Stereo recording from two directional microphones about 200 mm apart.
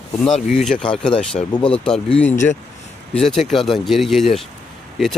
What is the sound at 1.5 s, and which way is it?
Speech, 25° left (ahead or behind).